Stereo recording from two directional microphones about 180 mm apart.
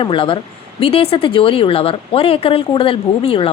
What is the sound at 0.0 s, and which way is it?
A woman's voice, 30° left (ahead or behind).